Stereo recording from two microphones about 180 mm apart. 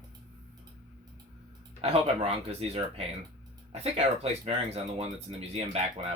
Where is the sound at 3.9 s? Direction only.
35° right (ahead or behind).